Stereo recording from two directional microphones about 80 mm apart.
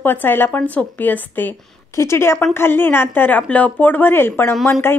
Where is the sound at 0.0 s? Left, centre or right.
Left.